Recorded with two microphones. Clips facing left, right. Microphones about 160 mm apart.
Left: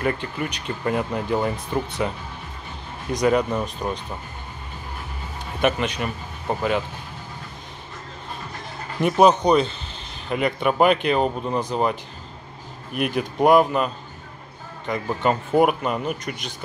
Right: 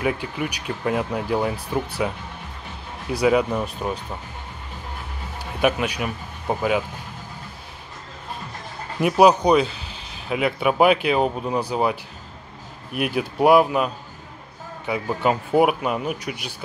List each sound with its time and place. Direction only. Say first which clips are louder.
0.0 s speech: even; 5° right (ahead or behind)
5.6 s speech: right 1 dB; 5° right (ahead or behind)
9.0 s speech: right 1 dB; 5° right (ahead or behind)